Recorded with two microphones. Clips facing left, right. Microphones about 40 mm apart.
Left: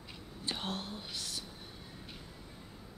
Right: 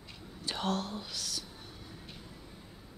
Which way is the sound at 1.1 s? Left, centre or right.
Left.